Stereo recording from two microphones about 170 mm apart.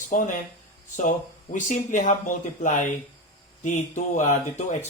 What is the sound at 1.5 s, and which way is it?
Speech, 45° left (ahead or behind).